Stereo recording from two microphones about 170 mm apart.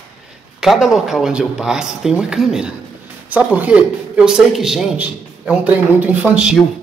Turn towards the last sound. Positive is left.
turn(degrees=-5)  # may be behind; listen again after turning